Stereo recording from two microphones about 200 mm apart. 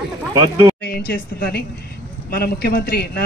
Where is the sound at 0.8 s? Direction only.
50° left (ahead or behind).